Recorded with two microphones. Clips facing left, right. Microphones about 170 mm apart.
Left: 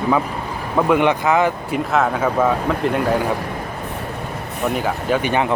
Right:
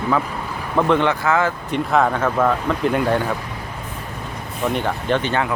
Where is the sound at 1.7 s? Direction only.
5° left (ahead or behind).